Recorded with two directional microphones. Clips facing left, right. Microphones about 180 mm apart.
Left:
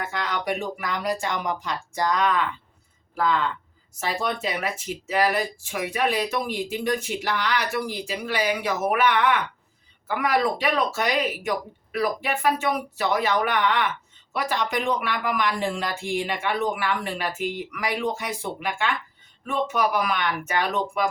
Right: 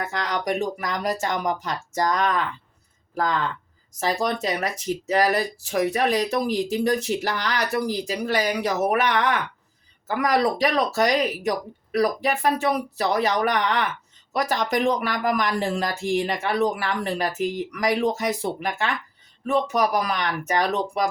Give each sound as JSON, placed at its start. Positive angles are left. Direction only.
{"t": 0.0, "sound": "speech", "side_deg": -40}
{"t": 4.0, "sound": "speech", "side_deg": -40}